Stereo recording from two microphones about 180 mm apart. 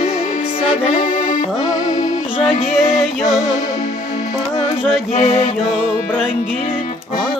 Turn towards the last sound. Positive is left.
turn(degrees=35)  # may be behind; listen again after turning